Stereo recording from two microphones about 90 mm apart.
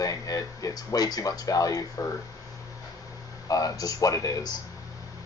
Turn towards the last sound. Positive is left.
turn(degrees=40)  # may be behind; listen again after turning